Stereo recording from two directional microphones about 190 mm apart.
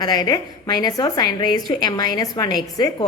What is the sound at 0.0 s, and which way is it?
A woman's voice, 20° left (ahead or behind).